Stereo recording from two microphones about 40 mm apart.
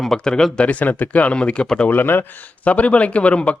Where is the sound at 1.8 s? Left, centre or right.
Left.